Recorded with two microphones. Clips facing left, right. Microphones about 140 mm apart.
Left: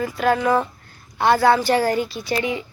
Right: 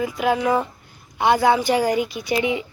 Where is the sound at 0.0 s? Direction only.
10° right (ahead or behind).